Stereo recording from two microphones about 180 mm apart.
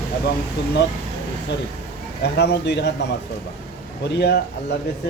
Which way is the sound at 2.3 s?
65° left (ahead or behind).